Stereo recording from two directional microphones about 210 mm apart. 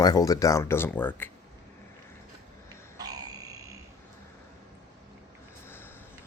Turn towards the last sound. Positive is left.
turn(degrees=10)  # may be behind; listen again after turning